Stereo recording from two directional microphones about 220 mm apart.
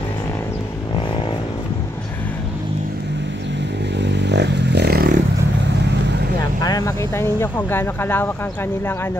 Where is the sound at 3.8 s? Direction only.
50° right (ahead or behind).